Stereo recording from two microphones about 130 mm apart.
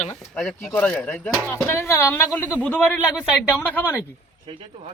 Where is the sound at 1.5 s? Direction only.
20° left (ahead or behind).